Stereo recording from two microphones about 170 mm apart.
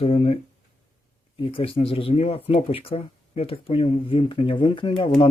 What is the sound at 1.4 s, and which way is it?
Speech, 30° left (ahead or behind).